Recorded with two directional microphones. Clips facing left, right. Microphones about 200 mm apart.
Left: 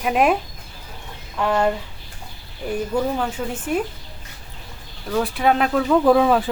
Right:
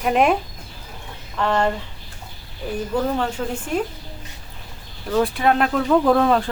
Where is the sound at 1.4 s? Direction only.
5° left (ahead or behind).